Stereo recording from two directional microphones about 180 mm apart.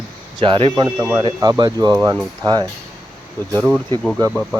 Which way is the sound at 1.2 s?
25° right (ahead or behind).